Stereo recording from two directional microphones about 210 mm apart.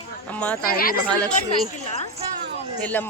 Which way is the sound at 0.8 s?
45° left (ahead or behind).